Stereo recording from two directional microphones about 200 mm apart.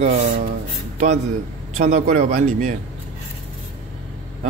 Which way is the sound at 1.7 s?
35° right (ahead or behind).